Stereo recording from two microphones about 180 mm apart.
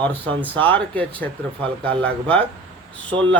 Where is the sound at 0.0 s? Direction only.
10° left (ahead or behind).